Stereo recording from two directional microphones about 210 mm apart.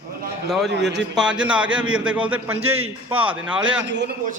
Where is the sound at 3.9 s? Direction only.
55° right (ahead or behind).